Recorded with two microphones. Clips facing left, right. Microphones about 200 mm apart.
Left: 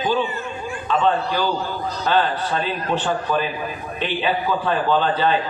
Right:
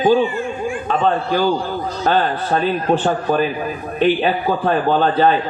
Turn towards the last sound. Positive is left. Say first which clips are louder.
# right 4 dB
turn(degrees=-45)  # may be behind; listen again after turning